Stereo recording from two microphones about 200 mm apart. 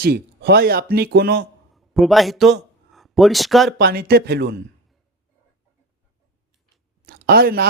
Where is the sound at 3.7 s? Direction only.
50° right (ahead or behind).